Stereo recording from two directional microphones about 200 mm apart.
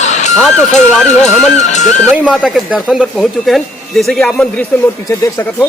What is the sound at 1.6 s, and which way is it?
Speech, 35° left (ahead or behind).